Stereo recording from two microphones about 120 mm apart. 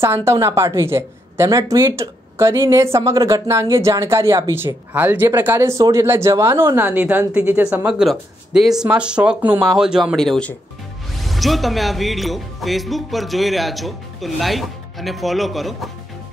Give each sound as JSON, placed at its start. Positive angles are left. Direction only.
{"t": 0.0, "sound": "a woman's voice", "side_deg": -20}